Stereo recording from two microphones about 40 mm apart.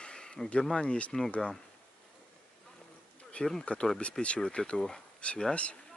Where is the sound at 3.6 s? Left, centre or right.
Left.